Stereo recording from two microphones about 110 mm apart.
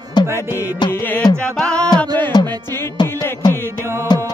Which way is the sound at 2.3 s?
40° left (ahead or behind).